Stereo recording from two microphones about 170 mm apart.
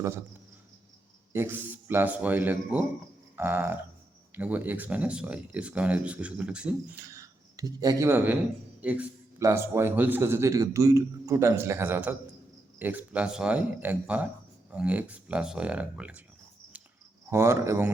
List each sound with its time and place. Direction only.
1.3 s a man's voice: 15° right (ahead or behind)
7.1 s a man's voice: 20° right (ahead or behind)
16.7 s cricket: 10° right (ahead or behind)
17.2 s a man's voice: 15° right (ahead or behind)